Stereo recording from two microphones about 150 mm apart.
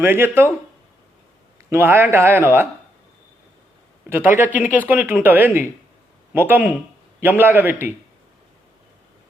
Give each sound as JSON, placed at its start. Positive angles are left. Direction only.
{"t": 0.0, "sound": "speech", "side_deg": -15}
{"t": 1.7, "sound": "speech", "side_deg": -15}
{"t": 4.1, "sound": "speech", "side_deg": -15}